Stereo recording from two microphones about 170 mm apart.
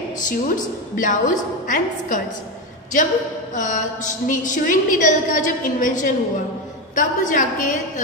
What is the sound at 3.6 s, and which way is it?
A woman's voice, 50° left (ahead or behind).